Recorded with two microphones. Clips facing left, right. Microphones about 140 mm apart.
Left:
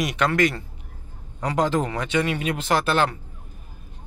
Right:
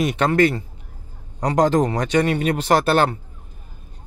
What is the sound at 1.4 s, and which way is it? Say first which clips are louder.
A man's voice: right 5 dB; 40° right (ahead or behind).